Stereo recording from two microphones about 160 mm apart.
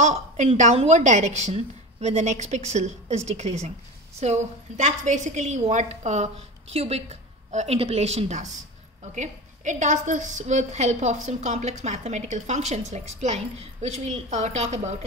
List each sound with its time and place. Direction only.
0.0 s a woman's voice: 45° right (ahead or behind)